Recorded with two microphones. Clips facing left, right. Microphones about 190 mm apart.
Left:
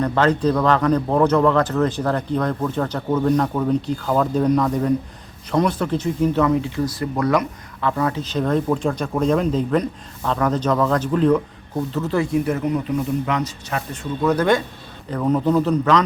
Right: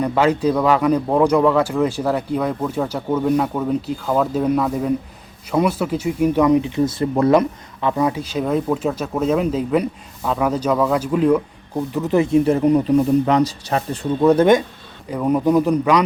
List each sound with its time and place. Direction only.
0.0 s speech: 10° right (ahead or behind)
11.9 s speech: 20° right (ahead or behind)
15.1 s speech: 10° right (ahead or behind)